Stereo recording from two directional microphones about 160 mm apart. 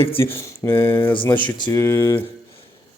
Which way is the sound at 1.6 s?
20° left (ahead or behind).